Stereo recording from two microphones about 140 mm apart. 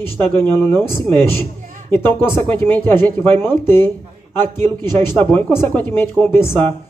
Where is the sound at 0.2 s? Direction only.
15° left (ahead or behind).